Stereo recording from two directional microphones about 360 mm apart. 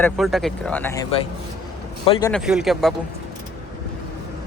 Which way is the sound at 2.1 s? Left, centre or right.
Centre.